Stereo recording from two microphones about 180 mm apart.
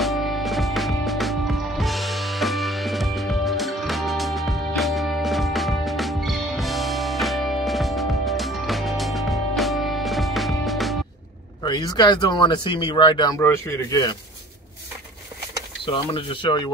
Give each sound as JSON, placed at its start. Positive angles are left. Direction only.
{"t": 0.0, "sound": "music", "side_deg": 0}
{"t": 11.6, "sound": "a man's voice", "side_deg": 25}
{"t": 15.8, "sound": "speech", "side_deg": 30}